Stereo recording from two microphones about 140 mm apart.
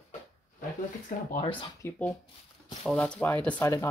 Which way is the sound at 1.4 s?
35° left (ahead or behind).